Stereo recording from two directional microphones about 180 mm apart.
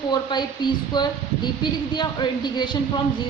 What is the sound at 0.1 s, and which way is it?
A woman's voice, 25° left (ahead or behind).